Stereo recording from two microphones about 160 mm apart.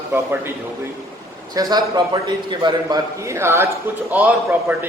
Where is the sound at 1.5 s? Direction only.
25° right (ahead or behind).